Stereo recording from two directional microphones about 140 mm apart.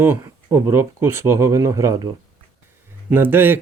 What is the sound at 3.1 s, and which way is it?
Speech, 15° right (ahead or behind).